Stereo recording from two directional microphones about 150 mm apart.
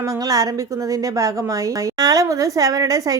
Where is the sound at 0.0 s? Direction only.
25° right (ahead or behind).